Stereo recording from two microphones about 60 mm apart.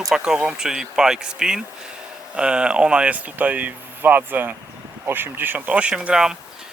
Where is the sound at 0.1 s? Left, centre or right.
Centre.